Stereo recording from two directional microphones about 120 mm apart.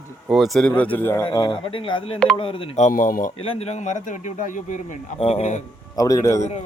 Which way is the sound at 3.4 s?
55° left (ahead or behind).